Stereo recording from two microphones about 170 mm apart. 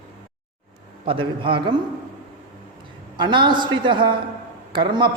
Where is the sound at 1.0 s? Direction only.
30° right (ahead or behind).